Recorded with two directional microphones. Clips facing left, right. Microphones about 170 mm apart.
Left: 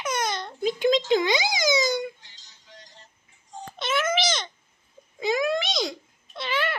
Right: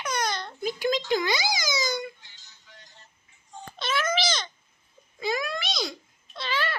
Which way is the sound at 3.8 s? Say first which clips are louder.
Left 2 dB; 25° left (ahead or behind).